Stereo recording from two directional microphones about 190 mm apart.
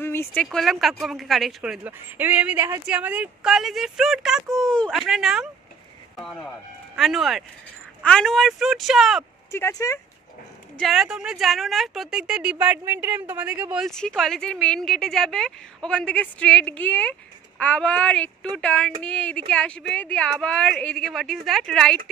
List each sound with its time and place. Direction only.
0.0 s speech: 10° left (ahead or behind)
9.5 s speech: 15° left (ahead or behind)
10.8 s speech: centre (ahead or behind)